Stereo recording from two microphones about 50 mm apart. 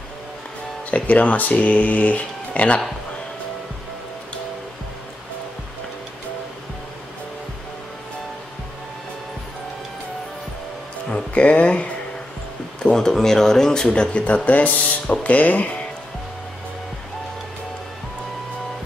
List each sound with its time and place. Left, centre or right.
0.8 s speech: left
11.1 s speech: left
12.8 s speech: centre; by 15.7 s left